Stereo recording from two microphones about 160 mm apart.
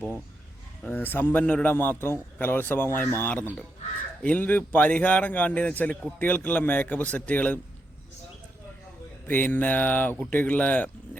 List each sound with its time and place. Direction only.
0.8 s speech: 10° left (ahead or behind)
9.2 s speech: 10° left (ahead or behind)